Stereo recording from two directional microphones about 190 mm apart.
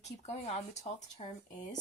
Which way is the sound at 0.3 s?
35° left (ahead or behind).